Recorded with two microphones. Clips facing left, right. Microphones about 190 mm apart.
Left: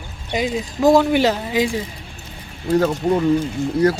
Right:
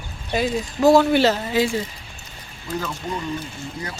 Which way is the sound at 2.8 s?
55° left (ahead or behind).